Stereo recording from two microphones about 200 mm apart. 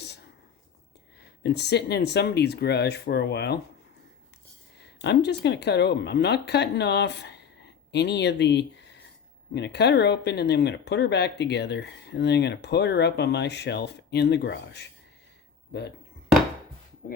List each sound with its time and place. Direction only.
1.5 s speech: 55° left (ahead or behind)
4.8 s speech: 60° left (ahead or behind)